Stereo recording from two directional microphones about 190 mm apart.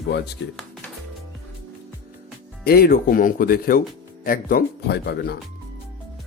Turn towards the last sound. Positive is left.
turn(degrees=60)  # may be behind; listen again after turning